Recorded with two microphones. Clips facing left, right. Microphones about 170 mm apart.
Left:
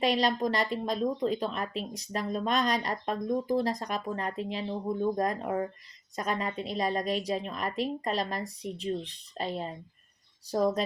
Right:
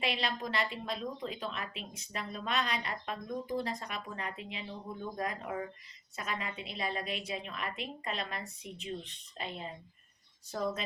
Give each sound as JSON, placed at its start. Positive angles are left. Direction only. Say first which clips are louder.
{"t": 0.0, "sound": "speech", "louder": "left 9 dB", "side_deg": 40}